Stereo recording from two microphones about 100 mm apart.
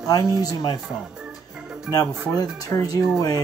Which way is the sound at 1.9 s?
40° left (ahead or behind).